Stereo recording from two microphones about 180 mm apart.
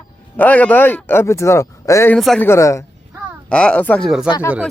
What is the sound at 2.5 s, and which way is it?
Speech, 15° left (ahead or behind).